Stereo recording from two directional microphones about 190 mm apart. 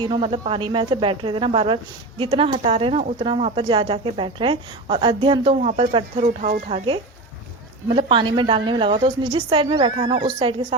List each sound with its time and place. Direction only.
0.0 s a woman's voice: 25° right (ahead or behind)